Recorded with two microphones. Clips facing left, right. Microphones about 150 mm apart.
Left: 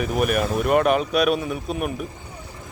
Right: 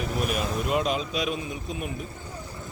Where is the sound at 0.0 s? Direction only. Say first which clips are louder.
Left 6 dB; 65° left (ahead or behind).